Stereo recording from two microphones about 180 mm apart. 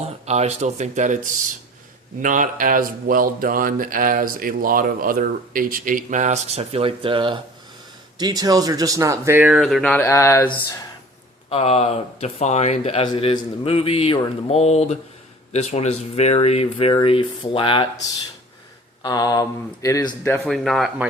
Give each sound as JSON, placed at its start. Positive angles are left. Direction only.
{"t": 0.3, "sound": "speech", "side_deg": -35}
{"t": 11.4, "sound": "speech", "side_deg": 35}
{"t": 19.0, "sound": "speech", "side_deg": 20}
{"t": 20.4, "sound": "speech", "side_deg": 0}